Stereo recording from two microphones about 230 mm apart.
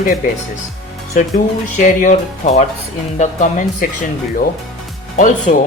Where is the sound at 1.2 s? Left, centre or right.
Left.